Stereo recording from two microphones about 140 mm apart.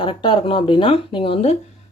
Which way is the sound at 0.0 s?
35° left (ahead or behind).